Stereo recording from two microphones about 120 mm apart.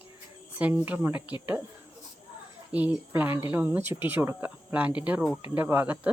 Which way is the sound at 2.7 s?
15° right (ahead or behind).